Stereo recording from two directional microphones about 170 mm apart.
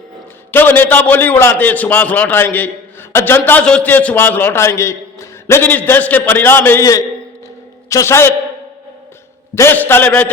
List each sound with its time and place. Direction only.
0.5 s a man's voice: 10° left (ahead or behind)
9.6 s a man's voice: 10° left (ahead or behind)